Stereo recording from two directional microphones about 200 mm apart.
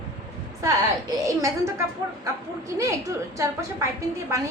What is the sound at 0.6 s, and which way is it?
Speech, 15° right (ahead or behind).